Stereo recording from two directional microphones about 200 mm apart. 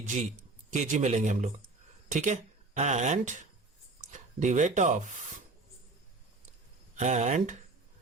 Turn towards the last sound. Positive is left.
turn(degrees=-35)  # may be behind; listen again after turning